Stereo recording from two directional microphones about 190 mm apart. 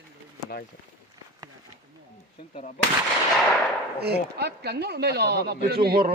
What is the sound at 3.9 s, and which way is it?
Speech, 60° right (ahead or behind).